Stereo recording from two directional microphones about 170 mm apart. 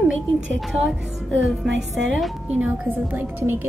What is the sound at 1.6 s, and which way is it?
Speech, 90° right.